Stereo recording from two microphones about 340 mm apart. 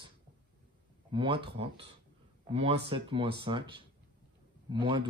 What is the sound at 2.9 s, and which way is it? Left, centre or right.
Speech, centre.